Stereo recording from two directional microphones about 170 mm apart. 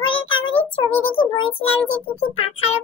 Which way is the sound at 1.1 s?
30° left (ahead or behind).